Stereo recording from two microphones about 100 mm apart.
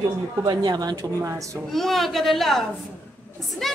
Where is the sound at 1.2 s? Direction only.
30° right (ahead or behind).